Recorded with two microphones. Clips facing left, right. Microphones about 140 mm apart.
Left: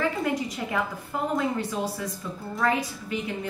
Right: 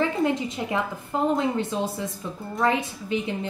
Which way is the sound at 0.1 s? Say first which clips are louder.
Right 3 dB; 25° right (ahead or behind).